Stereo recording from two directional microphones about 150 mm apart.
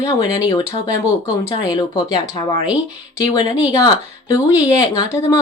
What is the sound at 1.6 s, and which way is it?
Speech, 25° left (ahead or behind).